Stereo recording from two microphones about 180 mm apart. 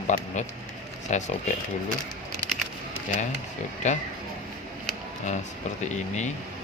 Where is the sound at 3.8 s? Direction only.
40° left (ahead or behind).